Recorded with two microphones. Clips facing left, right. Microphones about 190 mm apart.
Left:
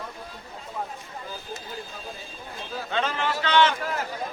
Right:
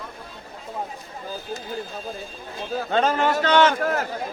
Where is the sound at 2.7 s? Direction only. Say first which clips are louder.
Right 7 dB; 45° right (ahead or behind).